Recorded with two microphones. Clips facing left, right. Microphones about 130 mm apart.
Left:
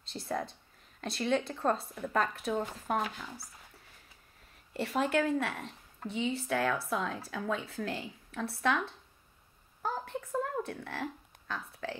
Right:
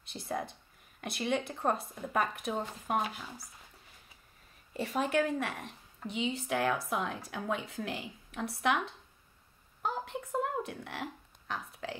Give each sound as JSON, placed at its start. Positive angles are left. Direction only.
{"t": 0.0, "sound": "a woman's voice", "side_deg": -15}
{"t": 4.7, "sound": "a woman's voice", "side_deg": -15}
{"t": 9.8, "sound": "a sound", "side_deg": -20}